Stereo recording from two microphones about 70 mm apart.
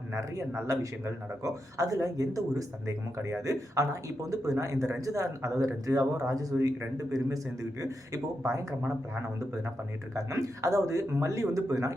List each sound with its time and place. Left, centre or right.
0.1 s a man's voice: right
10.2 s a man's voice: right